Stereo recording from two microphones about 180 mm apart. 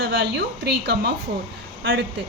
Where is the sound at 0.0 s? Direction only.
70° right (ahead or behind).